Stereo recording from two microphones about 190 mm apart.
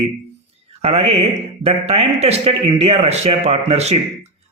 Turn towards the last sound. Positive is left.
turn(degrees=-35)  # may be behind; listen again after turning